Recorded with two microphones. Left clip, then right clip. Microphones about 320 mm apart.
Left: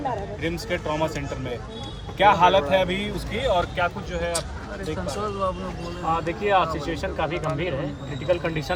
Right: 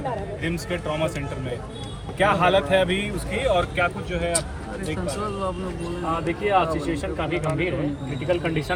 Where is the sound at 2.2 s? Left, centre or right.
Left.